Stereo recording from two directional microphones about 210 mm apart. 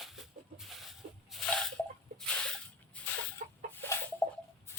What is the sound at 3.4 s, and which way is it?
Chicken, 40° right (ahead or behind).